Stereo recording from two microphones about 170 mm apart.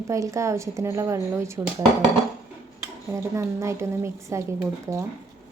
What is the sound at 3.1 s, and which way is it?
A woman's voice, 15° right (ahead or behind).